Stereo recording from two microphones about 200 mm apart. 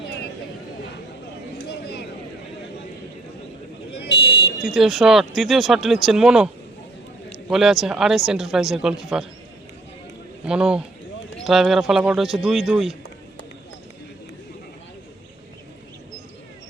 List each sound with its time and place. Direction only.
1.7 s a sound: 55° left (ahead or behind)
4.6 s speech: centre (ahead or behind)
7.5 s speech: centre (ahead or behind)
10.4 s speech: 5° right (ahead or behind)